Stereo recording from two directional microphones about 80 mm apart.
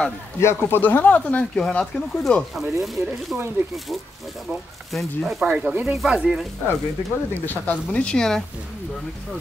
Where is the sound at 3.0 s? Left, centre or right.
Right.